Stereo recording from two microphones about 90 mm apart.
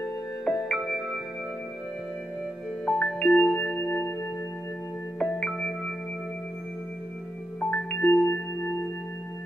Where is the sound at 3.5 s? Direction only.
25° left (ahead or behind).